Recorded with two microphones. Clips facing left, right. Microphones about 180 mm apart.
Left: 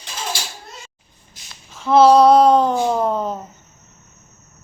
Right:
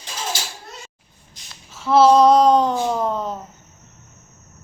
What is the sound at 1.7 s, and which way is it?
Child singing, 5° right (ahead or behind).